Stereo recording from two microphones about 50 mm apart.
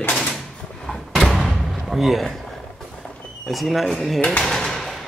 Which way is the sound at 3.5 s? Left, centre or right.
Centre.